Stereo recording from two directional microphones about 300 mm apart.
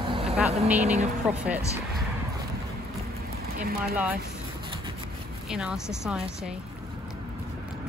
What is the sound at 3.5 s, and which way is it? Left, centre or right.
Speech, right.